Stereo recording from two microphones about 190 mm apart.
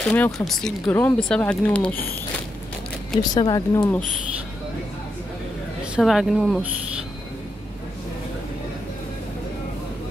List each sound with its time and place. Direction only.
0.0 s speech: 5° left (ahead or behind)
3.2 s speech: 20° left (ahead or behind)
5.9 s speech: centre (ahead or behind)